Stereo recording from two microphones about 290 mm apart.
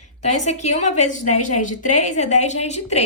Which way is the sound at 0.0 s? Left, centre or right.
Left.